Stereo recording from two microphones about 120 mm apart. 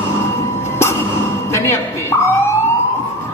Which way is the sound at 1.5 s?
20° left (ahead or behind).